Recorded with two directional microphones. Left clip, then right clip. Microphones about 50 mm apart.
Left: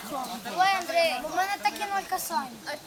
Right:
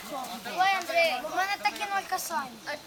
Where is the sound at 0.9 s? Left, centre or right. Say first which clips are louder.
Left 1 dB; centre.